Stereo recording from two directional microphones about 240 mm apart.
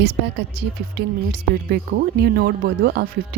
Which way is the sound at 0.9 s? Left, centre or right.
Right.